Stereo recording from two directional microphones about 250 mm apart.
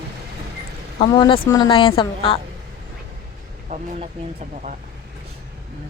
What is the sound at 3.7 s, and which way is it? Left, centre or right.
Speech, right.